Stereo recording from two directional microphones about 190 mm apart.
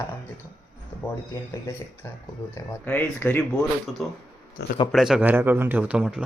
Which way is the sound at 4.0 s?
Centre (ahead or behind).